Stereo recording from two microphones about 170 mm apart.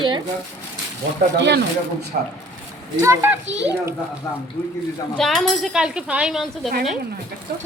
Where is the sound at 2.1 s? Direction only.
55° right (ahead or behind).